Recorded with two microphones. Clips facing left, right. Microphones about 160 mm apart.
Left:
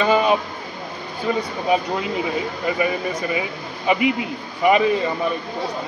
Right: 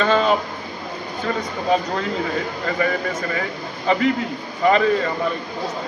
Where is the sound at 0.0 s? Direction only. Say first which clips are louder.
Even; 10° left (ahead or behind).